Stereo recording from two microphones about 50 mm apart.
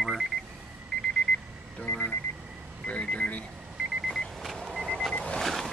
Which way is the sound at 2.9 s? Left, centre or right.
Left.